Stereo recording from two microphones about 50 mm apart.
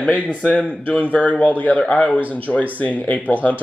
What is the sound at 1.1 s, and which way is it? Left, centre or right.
Speech, left.